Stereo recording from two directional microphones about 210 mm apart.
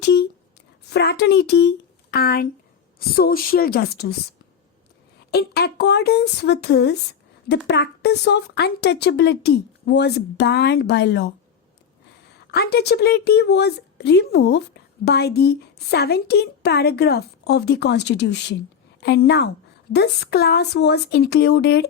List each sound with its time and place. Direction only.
0.0 s a sound: 55° left (ahead or behind)
0.9 s a woman's voice: 50° left (ahead or behind)
5.3 s a woman's voice: 50° left (ahead or behind)
12.5 s a woman's voice: 50° left (ahead or behind)